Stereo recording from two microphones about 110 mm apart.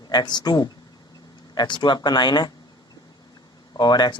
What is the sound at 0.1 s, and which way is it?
Speech, 40° left (ahead or behind).